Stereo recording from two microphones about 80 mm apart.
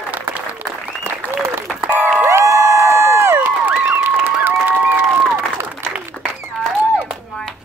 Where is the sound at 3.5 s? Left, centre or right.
Right.